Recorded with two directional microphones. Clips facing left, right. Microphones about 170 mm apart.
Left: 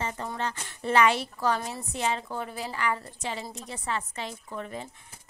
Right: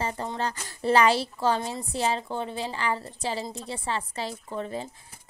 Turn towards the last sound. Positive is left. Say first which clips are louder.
# right 4 dB
turn(degrees=-30)  # may be behind; listen again after turning